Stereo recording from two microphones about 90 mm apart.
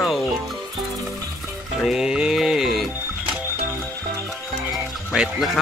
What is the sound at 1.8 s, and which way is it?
Speech, 10° right (ahead or behind).